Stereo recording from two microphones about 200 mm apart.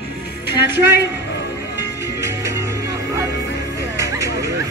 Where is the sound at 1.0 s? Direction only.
10° right (ahead or behind).